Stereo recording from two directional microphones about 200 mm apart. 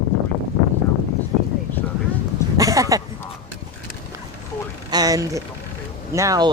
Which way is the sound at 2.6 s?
15° right (ahead or behind).